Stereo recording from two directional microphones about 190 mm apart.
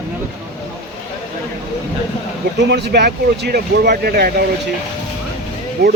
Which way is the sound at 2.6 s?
60° right (ahead or behind).